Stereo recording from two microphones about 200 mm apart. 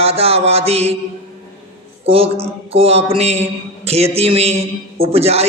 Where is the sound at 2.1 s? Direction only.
30° right (ahead or behind).